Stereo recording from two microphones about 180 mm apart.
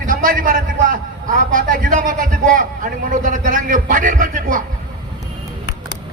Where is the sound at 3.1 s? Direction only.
45° right (ahead or behind).